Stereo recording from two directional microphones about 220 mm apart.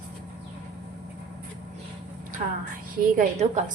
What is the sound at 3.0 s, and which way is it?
Speech, 35° right (ahead or behind).